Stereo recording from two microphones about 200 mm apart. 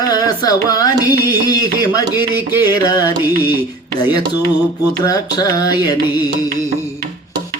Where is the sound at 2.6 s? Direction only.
20° left (ahead or behind).